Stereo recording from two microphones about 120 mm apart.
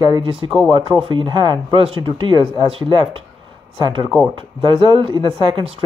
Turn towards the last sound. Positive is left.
turn(degrees=-45)  # may be behind; listen again after turning